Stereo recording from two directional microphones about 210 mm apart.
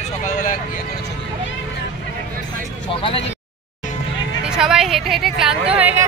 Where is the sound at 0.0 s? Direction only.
40° left (ahead or behind).